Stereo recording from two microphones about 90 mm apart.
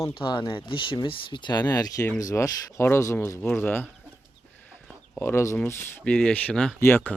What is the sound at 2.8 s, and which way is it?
Speech, 30° left (ahead or behind).